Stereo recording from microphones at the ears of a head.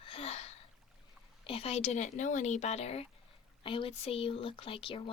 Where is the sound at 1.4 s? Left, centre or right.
Left.